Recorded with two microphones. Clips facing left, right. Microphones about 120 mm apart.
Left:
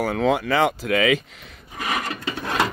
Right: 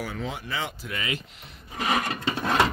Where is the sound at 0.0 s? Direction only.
80° left.